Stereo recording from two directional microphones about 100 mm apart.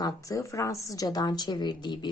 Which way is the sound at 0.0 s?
35° left (ahead or behind).